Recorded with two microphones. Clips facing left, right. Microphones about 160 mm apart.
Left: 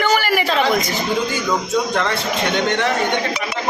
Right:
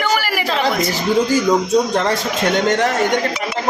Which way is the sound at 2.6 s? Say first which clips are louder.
Right 3 dB; 45° right (ahead or behind).